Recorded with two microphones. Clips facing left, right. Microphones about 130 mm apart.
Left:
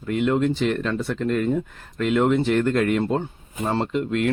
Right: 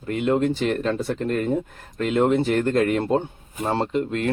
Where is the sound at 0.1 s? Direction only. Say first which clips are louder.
Even; 40° right (ahead or behind).